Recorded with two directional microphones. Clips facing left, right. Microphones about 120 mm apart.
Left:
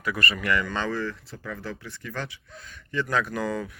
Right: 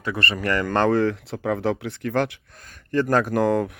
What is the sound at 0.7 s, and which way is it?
Speech, 60° right (ahead or behind).